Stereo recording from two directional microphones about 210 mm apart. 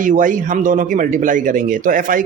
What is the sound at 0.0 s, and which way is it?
A man's voice, 40° right (ahead or behind).